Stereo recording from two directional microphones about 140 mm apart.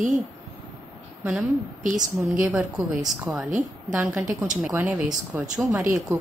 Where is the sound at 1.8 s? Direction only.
65° right (ahead or behind).